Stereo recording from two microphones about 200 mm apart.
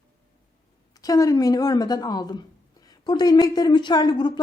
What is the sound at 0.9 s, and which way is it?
A woman's voice, 15° left (ahead or behind).